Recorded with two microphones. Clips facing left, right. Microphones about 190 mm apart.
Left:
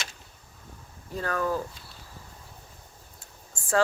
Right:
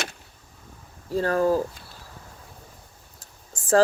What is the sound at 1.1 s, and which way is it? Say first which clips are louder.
Speech: right 7 dB; 35° right (ahead or behind).